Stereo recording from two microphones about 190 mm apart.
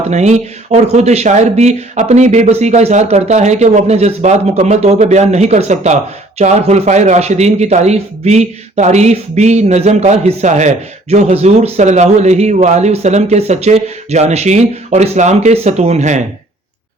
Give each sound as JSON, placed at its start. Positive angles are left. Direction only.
{"t": 0.1, "sound": "a man's voice", "side_deg": -35}